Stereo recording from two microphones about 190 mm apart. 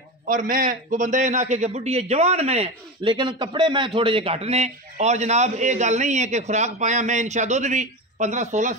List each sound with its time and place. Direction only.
0.3 s a man's voice: 45° right (ahead or behind)